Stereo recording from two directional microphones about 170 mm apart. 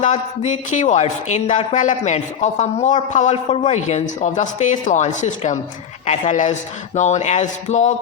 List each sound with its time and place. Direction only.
0.0 s speech: 45° left (ahead or behind)